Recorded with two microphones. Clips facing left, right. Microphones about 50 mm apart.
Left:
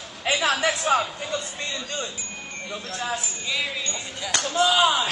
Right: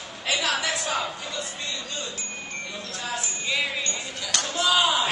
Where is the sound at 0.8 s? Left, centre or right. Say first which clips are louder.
Left 6 dB; left.